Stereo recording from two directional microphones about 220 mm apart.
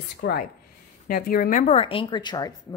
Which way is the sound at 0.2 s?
45° left (ahead or behind).